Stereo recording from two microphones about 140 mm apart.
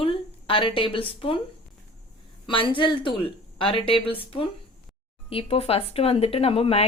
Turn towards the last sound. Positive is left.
turn(degrees=45)  # may be behind; listen again after turning